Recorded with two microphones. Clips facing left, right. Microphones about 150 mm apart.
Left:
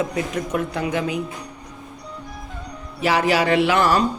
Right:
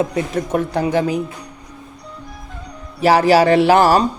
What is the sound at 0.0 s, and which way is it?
Speech, 25° right (ahead or behind).